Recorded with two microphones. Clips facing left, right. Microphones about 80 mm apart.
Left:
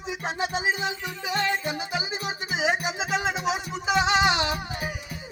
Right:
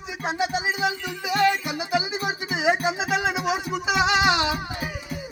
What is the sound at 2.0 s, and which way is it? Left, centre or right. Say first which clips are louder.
Music: right 4 dB; left.